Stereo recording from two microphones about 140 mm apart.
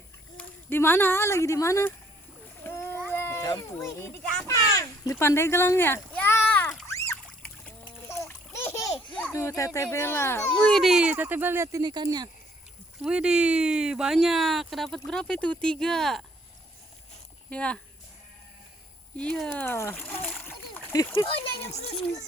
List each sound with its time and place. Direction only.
0.3 s speech: 15° left (ahead or behind)
2.6 s a sound: 15° left (ahead or behind)
6.8 s splash: 20° left (ahead or behind)
7.2 s a sound: 10° left (ahead or behind)
8.0 s splash: 20° left (ahead or behind)
9.3 s speech: 20° left (ahead or behind)
10.5 s speech: 5° left (ahead or behind); by 12.3 s 30° right (ahead or behind)
13.0 s speech: 5° right (ahead or behind)
17.5 s speech: 10° left (ahead or behind)
19.1 s a child's voice: 5° left (ahead or behind)
20.2 s splash: 5° left (ahead or behind)
20.5 s a sound: 20° left (ahead or behind)
21.7 s a child's voice: 50° left (ahead or behind)